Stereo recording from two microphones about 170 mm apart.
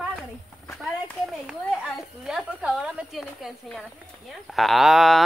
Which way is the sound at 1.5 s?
Centre (ahead or behind).